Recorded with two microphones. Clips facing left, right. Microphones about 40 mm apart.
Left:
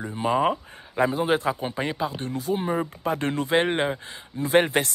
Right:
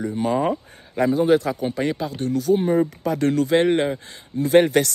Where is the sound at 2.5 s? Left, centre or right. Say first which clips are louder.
Right 7 dB; centre.